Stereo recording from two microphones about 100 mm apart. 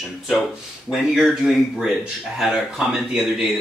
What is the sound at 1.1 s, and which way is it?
Speech, 5° right (ahead or behind).